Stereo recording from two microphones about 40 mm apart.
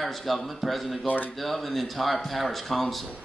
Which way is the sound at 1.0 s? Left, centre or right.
Left.